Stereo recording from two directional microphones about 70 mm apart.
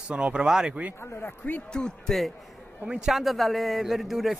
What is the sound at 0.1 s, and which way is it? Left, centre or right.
Speech, centre.